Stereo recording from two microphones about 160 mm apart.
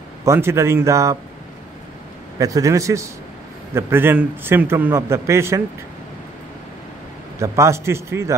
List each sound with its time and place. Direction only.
0.2 s a man's voice: 15° right (ahead or behind)
2.3 s a man's voice: 20° right (ahead or behind)
7.3 s a man's voice: 20° right (ahead or behind)